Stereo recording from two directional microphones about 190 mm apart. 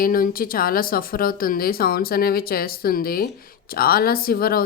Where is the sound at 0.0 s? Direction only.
50° left (ahead or behind).